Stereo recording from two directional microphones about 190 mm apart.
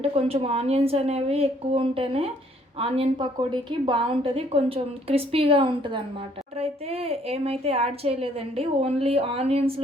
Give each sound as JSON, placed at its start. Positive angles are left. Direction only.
{"t": 0.0, "sound": "a woman's voice", "side_deg": -30}